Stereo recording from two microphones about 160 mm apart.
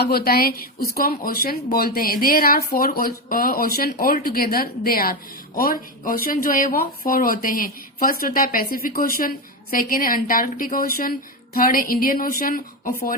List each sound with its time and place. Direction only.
0.0 s speech: 70° left (ahead or behind)